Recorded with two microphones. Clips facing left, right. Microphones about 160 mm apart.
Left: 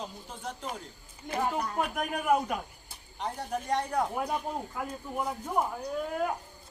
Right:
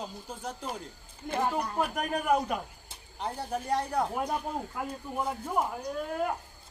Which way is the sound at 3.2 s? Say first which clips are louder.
Even; 5° right (ahead or behind).